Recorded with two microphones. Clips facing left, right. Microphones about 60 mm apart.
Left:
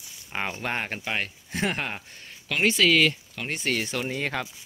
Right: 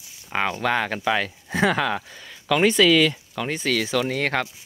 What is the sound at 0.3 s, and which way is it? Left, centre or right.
Speech, right.